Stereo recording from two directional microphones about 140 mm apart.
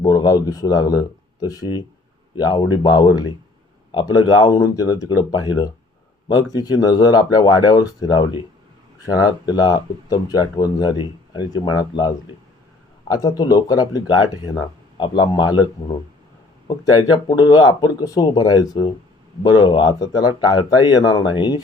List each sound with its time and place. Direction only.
0.0 s speech: 25° left (ahead or behind)
17.0 s speech: 25° left (ahead or behind)